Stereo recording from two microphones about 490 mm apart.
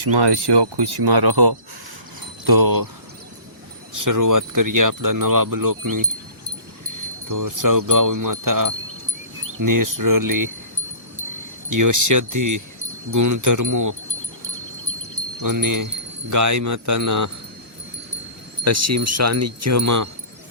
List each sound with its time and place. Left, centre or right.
0.0 s speech: right
3.9 s speech: right
7.3 s speech: right
11.7 s speech: right
15.4 s speech: right
18.6 s speech: right